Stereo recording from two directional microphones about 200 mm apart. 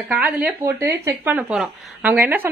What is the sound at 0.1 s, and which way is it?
A woman's voice, 5° right (ahead or behind).